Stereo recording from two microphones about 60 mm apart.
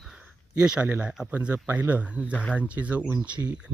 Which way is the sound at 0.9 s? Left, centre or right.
Right.